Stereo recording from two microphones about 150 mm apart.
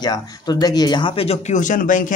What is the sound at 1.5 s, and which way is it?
Speech, 60° left (ahead or behind).